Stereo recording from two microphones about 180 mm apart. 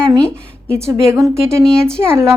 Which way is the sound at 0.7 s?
15° right (ahead or behind).